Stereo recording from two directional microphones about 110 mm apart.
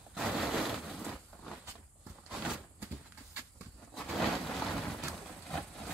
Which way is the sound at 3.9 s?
Centre (ahead or behind).